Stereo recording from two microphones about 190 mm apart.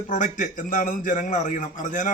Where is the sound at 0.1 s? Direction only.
40° left (ahead or behind).